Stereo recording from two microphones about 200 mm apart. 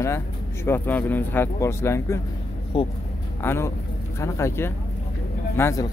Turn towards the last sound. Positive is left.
turn(degrees=15)  # may be behind; listen again after turning